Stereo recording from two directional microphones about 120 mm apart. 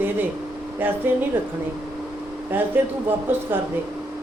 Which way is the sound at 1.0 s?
15° right (ahead or behind).